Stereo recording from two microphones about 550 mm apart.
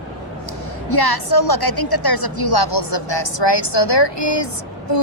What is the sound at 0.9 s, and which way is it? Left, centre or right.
A woman's voice, left.